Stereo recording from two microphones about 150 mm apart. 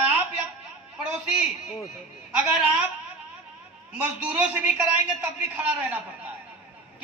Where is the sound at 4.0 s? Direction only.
10° right (ahead or behind).